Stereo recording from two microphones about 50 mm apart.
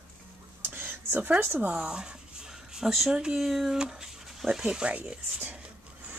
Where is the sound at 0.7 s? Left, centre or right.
Right.